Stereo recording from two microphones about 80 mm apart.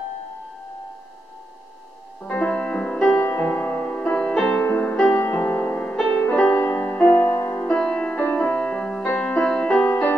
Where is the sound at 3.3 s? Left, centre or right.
Centre.